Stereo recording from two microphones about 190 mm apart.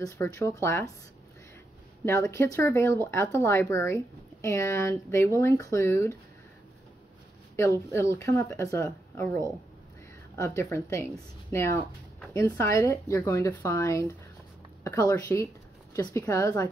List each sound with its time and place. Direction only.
0.0 s speech: 15° left (ahead or behind)
2.0 s speech: 15° left (ahead or behind)
7.5 s speech: 15° left (ahead or behind)
12.4 s speech: 15° left (ahead or behind)